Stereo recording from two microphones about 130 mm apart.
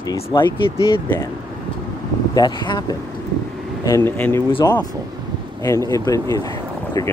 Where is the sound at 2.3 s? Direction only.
35° left (ahead or behind).